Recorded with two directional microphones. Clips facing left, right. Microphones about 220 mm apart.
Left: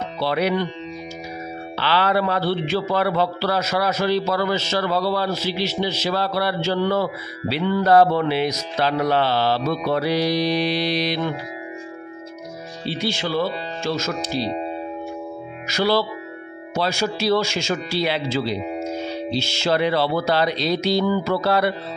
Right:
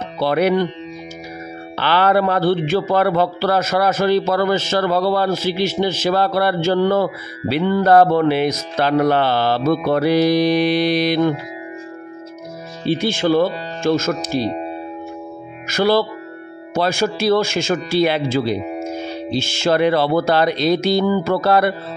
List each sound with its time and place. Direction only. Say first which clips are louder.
0.2 s a man's voice: right 5 dB; 50° right (ahead or behind)
1.8 s a man's voice: right 4 dB; 50° right (ahead or behind)
12.8 s a man's voice: right 8 dB; 50° right (ahead or behind)
15.7 s a man's voice: right 4 dB; 50° right (ahead or behind)